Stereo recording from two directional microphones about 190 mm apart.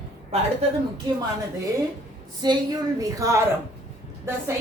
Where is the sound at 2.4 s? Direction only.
20° right (ahead or behind).